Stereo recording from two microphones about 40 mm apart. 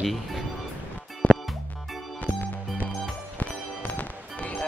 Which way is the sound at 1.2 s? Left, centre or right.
Left.